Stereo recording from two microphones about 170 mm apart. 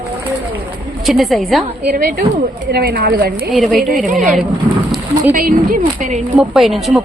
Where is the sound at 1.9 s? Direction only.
60° right (ahead or behind).